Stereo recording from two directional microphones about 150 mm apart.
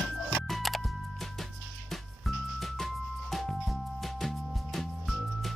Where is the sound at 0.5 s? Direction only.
Centre (ahead or behind).